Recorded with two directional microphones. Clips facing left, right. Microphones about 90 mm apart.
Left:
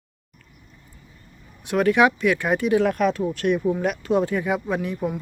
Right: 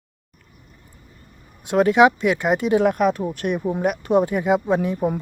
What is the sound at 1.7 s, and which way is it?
Speech, 25° right (ahead or behind).